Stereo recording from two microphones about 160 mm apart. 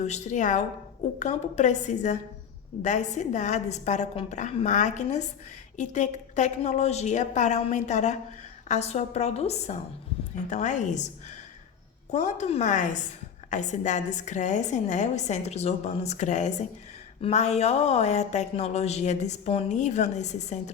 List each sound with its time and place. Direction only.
0.0 s speech: 45° left (ahead or behind)
12.1 s speech: 45° left (ahead or behind)